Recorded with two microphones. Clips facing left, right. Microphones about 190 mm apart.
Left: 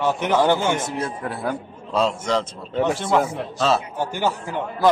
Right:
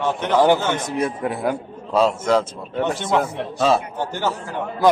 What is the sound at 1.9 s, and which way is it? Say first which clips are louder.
A man's voice: right 4 dB; 5° right (ahead or behind).